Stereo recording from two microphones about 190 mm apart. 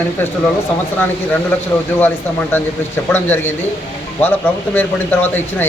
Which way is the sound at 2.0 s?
10° left (ahead or behind).